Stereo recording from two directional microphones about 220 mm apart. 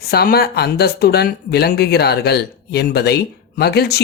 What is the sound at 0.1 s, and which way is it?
Speech, 45° left (ahead or behind).